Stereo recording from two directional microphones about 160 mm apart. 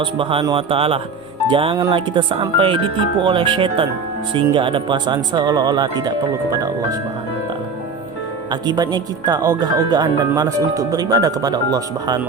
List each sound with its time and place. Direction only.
0.0 s speech: 35° right (ahead or behind)
8.4 s speech: 25° right (ahead or behind)